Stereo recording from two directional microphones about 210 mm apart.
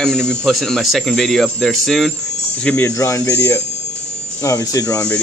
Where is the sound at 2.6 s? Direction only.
10° left (ahead or behind).